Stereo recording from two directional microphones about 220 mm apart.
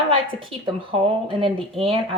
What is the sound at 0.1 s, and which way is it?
Speech, 25° right (ahead or behind).